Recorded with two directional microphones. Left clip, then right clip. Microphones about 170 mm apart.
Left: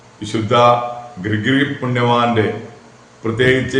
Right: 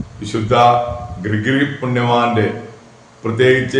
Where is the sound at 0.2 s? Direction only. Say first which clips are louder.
Right 1 dB; 15° left (ahead or behind).